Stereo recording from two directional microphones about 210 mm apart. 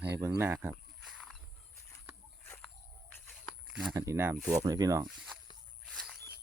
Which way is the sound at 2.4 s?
10° left (ahead or behind).